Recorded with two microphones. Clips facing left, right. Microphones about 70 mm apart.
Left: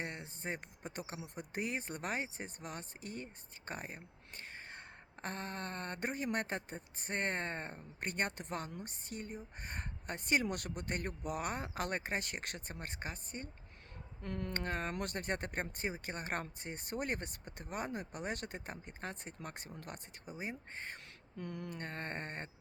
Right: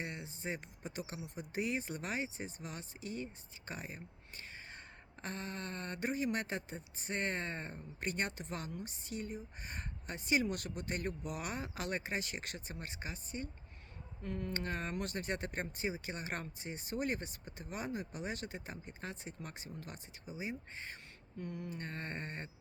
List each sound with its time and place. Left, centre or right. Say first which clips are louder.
0.0 s speech: even; left
3.7 s a sound: left 1 dB; left
5.2 s speech: left 1 dB; left
14.2 s speech: even; left
21.3 s a sound: even; left
21.8 s speech: left 1 dB; left